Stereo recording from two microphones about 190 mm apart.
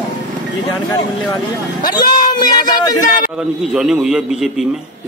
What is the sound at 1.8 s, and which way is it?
Speech, 50° left (ahead or behind).